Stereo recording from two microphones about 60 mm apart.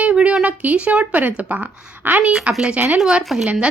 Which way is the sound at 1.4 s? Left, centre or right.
Right.